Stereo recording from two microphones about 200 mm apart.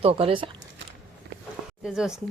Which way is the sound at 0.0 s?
30° right (ahead or behind).